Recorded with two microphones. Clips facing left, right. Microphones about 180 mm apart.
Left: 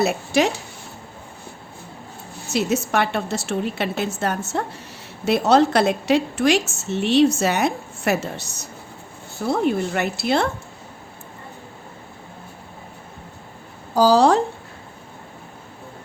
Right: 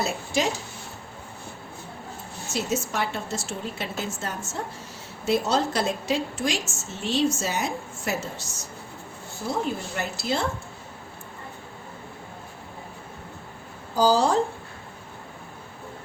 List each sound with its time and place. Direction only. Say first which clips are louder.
0.0 s a woman's voice: left 7 dB; 65° left (ahead or behind)
2.5 s a woman's voice: left 7 dB; 65° left (ahead or behind)
13.9 s a woman's voice: left 6 dB; 75° left (ahead or behind)